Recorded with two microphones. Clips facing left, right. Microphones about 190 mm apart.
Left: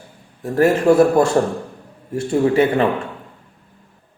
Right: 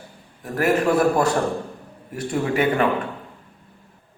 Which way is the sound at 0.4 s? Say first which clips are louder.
Left 6 dB; 25° left (ahead or behind).